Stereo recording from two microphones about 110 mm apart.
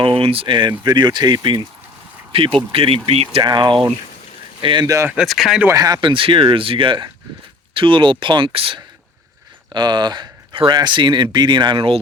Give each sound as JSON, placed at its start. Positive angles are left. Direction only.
{"t": 0.0, "sound": "speech", "side_deg": -55}
{"t": 2.3, "sound": "speech", "side_deg": -55}
{"t": 3.4, "sound": "speech", "side_deg": -40}
{"t": 5.2, "sound": "speech", "side_deg": 0}
{"t": 5.7, "sound": "speech", "side_deg": -35}